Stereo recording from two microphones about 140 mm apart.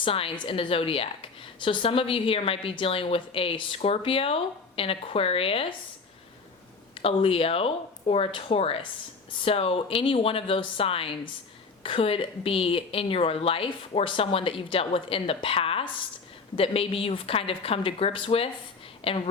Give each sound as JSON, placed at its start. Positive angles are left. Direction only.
{"t": 0.0, "sound": "a woman's voice", "side_deg": 40}
{"t": 6.9, "sound": "a woman's voice", "side_deg": 40}